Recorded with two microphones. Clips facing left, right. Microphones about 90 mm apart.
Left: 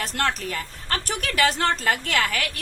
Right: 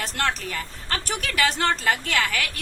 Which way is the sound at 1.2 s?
40° left (ahead or behind).